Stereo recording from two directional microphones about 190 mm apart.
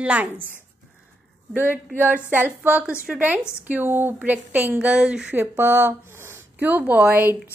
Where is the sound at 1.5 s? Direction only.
10° right (ahead or behind).